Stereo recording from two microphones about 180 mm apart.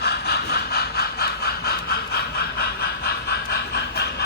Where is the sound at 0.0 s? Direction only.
65° left (ahead or behind).